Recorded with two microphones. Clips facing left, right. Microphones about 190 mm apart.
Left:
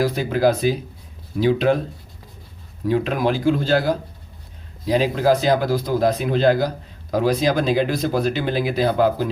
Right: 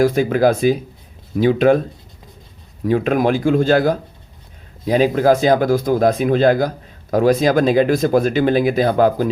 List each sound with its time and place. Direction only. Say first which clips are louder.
0.0 s speech: right 4 dB; 50° right (ahead or behind)
2.8 s speech: right 4 dB; 50° right (ahead or behind)